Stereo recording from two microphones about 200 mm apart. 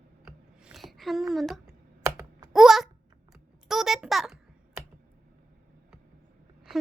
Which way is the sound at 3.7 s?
Centre (ahead or behind).